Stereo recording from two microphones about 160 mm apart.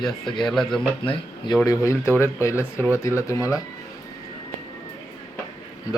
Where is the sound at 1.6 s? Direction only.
20° left (ahead or behind).